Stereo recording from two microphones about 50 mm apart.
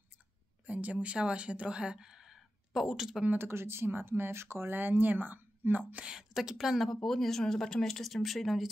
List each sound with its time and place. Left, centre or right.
0.7 s speech: right; by 3.3 s centre
3.3 s speech: right
4.7 s speech: right
6.0 s a woman's voice: centre
6.9 s speech: centre